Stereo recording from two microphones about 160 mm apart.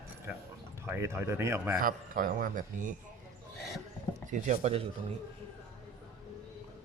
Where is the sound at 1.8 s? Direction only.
60° right (ahead or behind).